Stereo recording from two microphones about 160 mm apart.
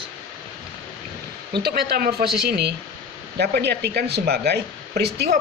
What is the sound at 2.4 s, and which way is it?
Speech, 90° right.